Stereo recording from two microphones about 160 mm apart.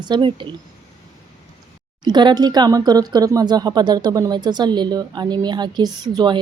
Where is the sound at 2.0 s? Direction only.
25° right (ahead or behind).